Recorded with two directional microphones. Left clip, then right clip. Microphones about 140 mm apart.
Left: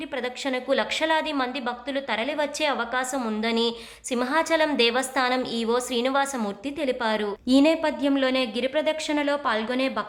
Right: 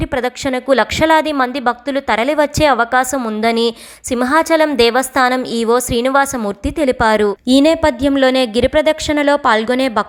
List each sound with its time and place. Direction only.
0.0 s a woman's voice: 45° right (ahead or behind)
3.2 s a woman's voice: 25° right (ahead or behind)
3.4 s a woman's voice: 45° right (ahead or behind)